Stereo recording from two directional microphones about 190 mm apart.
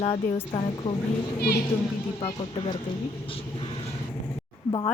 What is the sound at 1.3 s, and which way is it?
Speech, 55° left (ahead or behind).